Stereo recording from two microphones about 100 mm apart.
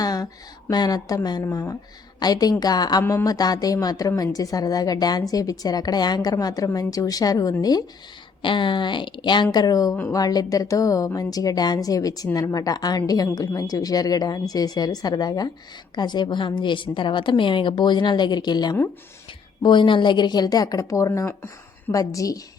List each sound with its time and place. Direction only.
0.0 s a sound: 40° left (ahead or behind)
0.7 s a woman's voice: 45° left (ahead or behind)
8.4 s a woman's voice: 55° left (ahead or behind); by 22.4 s 35° left (ahead or behind)